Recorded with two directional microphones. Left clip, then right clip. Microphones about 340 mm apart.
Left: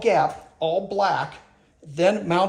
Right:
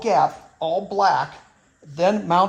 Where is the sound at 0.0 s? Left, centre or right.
Centre.